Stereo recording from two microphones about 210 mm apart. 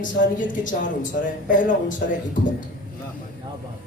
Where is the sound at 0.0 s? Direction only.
40° left (ahead or behind).